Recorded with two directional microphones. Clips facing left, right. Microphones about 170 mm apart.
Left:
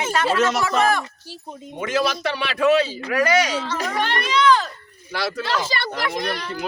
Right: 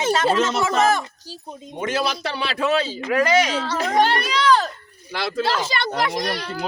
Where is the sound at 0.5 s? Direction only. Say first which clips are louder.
Right 1 dB; 25° right (ahead or behind).